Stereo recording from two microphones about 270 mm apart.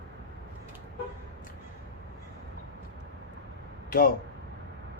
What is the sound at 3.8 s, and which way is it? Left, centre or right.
Speech, left.